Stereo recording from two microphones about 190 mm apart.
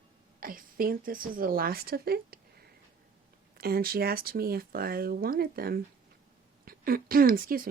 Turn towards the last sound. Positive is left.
turn(degrees=-50)  # may be behind; listen again after turning